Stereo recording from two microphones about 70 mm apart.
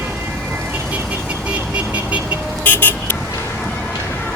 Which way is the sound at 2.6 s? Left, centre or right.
Left.